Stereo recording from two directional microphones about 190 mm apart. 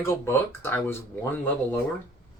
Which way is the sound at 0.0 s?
15° left (ahead or behind).